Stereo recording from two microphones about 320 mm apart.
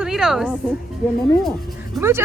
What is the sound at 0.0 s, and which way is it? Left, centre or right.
Speech, centre.